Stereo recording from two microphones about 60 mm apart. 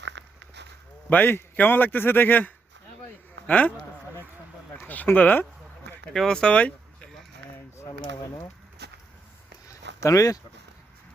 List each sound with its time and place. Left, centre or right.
1.1 s a man's voice: left
5.1 s speech: left
6.1 s speech: centre
7.9 s speech: left
10.0 s speech: left